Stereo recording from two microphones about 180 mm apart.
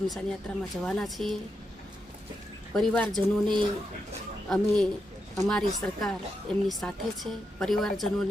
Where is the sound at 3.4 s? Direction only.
25° right (ahead or behind).